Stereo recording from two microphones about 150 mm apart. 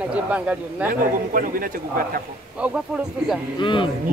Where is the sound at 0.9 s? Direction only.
70° right (ahead or behind).